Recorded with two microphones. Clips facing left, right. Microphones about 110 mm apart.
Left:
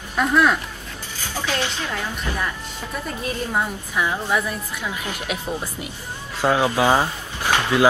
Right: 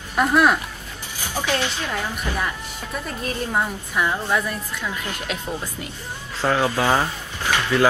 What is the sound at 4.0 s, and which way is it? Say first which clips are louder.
Speech: even; 10° left (ahead or behind).